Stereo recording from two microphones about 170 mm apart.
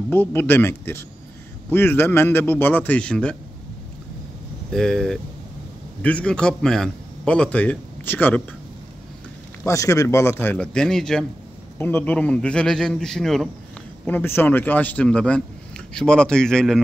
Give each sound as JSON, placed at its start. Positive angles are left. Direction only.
{"t": 0.1, "sound": "a man's voice", "side_deg": 10}
{"t": 4.7, "sound": "a man's voice", "side_deg": 5}
{"t": 9.7, "sound": "a man's voice", "side_deg": 20}